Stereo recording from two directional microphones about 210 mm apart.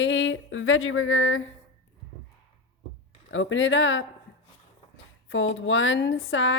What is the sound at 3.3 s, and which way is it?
Speech, 65° left (ahead or behind).